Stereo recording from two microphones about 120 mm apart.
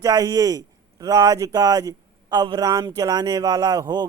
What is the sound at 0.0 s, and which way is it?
A man's voice, 30° right (ahead or behind).